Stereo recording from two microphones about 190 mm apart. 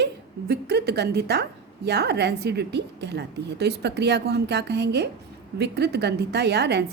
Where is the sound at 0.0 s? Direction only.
60° right (ahead or behind).